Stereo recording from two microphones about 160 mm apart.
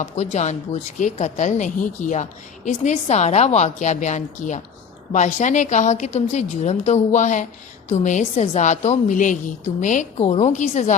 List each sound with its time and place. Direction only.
0.0 s a woman's voice: 45° left (ahead or behind)